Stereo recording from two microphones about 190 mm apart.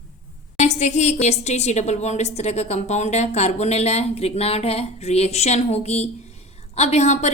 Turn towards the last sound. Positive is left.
turn(degrees=35)  # may be behind; listen again after turning